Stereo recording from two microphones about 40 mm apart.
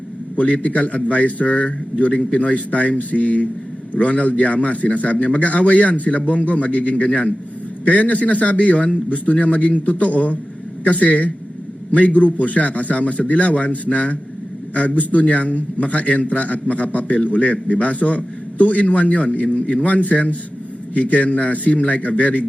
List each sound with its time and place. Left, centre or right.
0.3 s a man's voice: left